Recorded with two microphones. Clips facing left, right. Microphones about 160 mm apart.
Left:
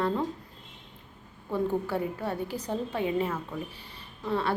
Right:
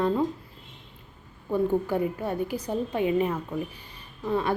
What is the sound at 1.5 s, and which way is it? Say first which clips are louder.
A woman's voice: right 4 dB; 15° right (ahead or behind).